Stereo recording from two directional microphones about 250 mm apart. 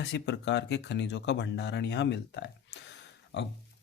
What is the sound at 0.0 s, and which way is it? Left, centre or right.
Speech, left.